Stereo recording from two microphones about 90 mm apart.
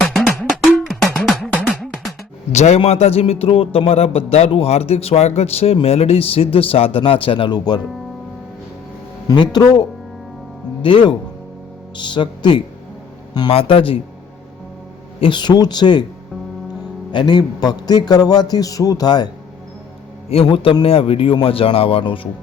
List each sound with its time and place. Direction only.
0.0 s cowbell: 5° left (ahead or behind)
1.6 s music: centre (ahead or behind)
2.7 s speech: 90° left
7.5 s a man's voice: 50° left (ahead or behind)
9.2 s a man's voice: 55° left (ahead or behind)
10.8 s speech: 70° left (ahead or behind)
13.5 s speech: 85° left
15.2 s speech: 60° left (ahead or behind)
17.1 s a man's voice: 60° left (ahead or behind)
20.3 s speech: 85° left